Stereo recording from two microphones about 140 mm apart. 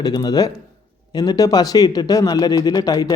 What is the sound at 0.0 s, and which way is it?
Speech, 30° left (ahead or behind).